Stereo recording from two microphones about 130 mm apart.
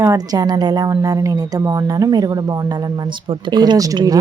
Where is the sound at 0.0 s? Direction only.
25° right (ahead or behind).